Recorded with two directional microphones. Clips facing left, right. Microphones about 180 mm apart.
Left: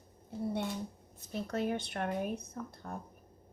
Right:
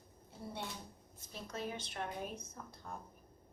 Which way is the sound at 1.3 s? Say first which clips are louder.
Left 9 dB; 60° left (ahead or behind).